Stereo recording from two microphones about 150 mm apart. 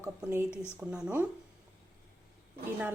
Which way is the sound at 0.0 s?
15° right (ahead or behind).